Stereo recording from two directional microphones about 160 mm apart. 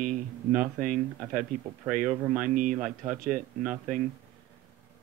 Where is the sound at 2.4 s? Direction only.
55° right (ahead or behind).